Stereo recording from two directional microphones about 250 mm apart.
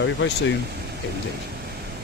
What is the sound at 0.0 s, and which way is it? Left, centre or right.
Speech, left.